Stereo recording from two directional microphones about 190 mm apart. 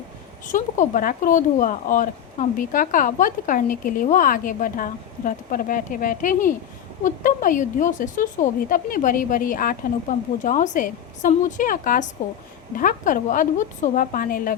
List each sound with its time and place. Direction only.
0.5 s speech: 45° left (ahead or behind)